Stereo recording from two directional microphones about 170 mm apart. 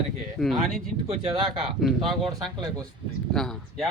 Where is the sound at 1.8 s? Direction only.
Centre (ahead or behind).